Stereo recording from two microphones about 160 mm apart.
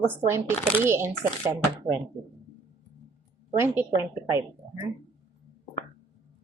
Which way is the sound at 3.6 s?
15° right (ahead or behind).